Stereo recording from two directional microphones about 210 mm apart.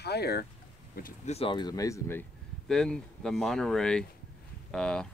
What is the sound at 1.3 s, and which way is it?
Speech, 25° left (ahead or behind).